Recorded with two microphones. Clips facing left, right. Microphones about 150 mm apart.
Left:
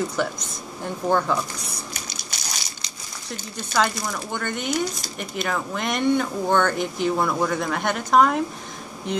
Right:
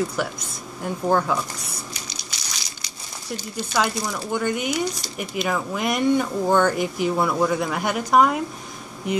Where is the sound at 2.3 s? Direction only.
50° left (ahead or behind).